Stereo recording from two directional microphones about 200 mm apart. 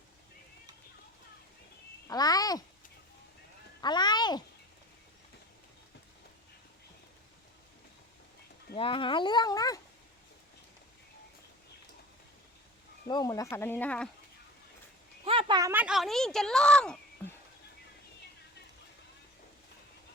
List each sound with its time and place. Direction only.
2.0 s a sound: 20° left (ahead or behind)
3.8 s speech: 20° left (ahead or behind)
8.7 s speech: 25° left (ahead or behind)
13.1 s speech: 20° left (ahead or behind)
15.2 s a sound: 25° right (ahead or behind)
15.7 s speech: 5° right (ahead or behind)